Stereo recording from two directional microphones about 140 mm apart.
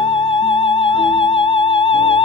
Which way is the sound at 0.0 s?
40° left (ahead or behind).